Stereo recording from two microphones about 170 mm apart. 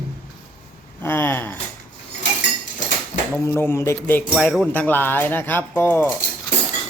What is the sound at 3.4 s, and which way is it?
Speech, 15° left (ahead or behind).